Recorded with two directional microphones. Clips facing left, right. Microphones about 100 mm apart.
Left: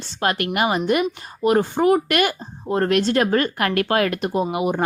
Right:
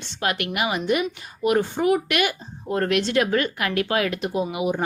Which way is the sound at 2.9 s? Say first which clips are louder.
Left 2 dB; 40° left (ahead or behind).